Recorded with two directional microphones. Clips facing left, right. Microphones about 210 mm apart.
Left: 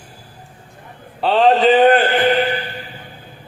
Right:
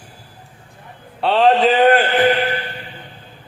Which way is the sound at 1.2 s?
Centre (ahead or behind).